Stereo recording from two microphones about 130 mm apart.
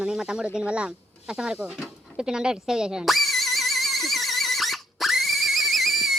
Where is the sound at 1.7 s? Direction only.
5° right (ahead or behind).